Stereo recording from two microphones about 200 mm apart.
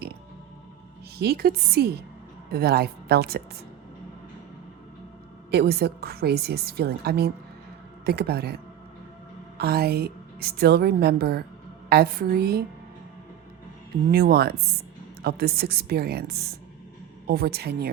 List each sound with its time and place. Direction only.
1.2 s a woman's voice: 50° right (ahead or behind)
5.5 s a woman's voice: 55° right (ahead or behind)
9.6 s a woman's voice: 50° right (ahead or behind)
14.1 s a woman's voice: 50° right (ahead or behind)